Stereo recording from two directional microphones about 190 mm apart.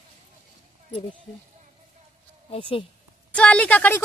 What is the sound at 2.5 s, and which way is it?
Speech, 30° left (ahead or behind).